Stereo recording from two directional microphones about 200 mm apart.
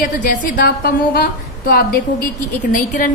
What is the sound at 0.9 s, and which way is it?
A woman's voice, 50° left (ahead or behind).